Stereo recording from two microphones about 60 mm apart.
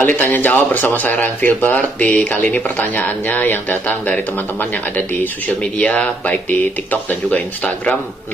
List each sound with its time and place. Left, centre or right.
0.0 s speech: left
5.6 s speech: centre